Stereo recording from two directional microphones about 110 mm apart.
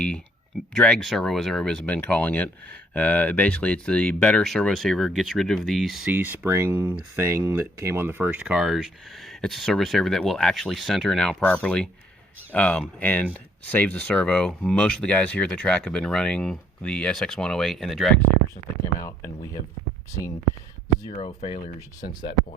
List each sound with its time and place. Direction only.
0.8 s speech: 5° left (ahead or behind)
6.1 s speech: 15° right (ahead or behind)
8.4 s speech: 5° right (ahead or behind)
18.9 s speech: 30° left (ahead or behind)
21.2 s speech: 60° left (ahead or behind)